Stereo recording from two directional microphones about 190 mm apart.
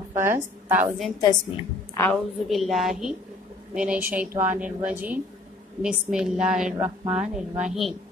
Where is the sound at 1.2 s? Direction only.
20° left (ahead or behind).